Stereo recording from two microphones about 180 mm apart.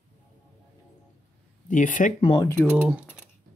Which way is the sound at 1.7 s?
45° left (ahead or behind).